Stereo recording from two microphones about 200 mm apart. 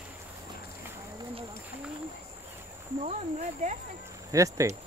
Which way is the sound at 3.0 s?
35° right (ahead or behind).